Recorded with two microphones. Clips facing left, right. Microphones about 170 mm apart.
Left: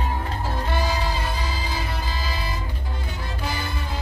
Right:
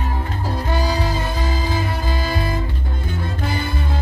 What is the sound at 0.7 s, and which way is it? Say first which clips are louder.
Music: right 5 dB; 45° right (ahead or behind).